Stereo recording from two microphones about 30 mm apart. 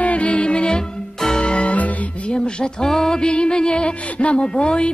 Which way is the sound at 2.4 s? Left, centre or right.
Left.